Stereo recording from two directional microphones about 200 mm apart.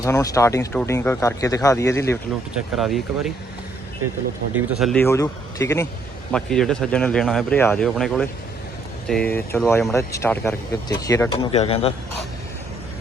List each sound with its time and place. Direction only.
0.0 s speech: 15° left (ahead or behind)
2.7 s speech: centre (ahead or behind)
4.5 s speech: centre (ahead or behind)
4.9 s speech: 15° left (ahead or behind)
6.3 s speech: centre (ahead or behind)
11.5 s speech: 30° left (ahead or behind)